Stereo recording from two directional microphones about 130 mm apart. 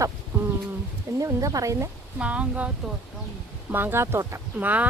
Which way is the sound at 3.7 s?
15° right (ahead or behind).